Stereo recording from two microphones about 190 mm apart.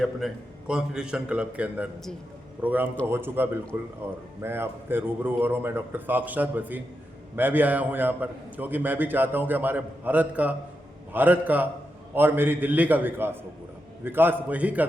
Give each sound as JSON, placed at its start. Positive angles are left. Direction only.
{"t": 0.2, "sound": "a man's voice", "side_deg": 0}